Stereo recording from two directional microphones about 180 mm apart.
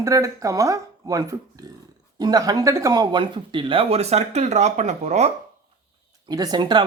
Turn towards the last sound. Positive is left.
turn(degrees=-25)  # may be behind; listen again after turning